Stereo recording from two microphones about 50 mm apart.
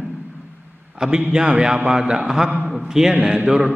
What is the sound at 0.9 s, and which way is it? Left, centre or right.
A man's voice, centre.